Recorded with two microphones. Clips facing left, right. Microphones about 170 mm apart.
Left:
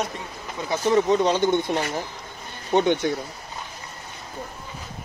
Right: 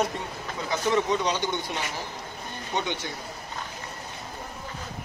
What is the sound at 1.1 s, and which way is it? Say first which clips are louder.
Speech: left 7 dB; 50° left (ahead or behind).